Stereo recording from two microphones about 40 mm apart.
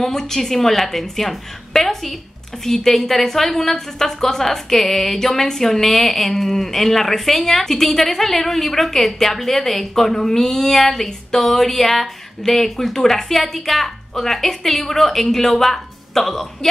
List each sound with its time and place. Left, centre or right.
0.0 s a woman's voice: centre